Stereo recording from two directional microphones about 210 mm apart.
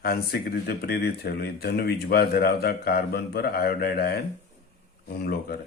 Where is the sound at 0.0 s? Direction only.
45° left (ahead or behind).